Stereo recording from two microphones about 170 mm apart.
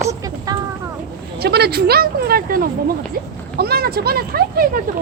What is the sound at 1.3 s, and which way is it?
Speech, 70° right (ahead or behind).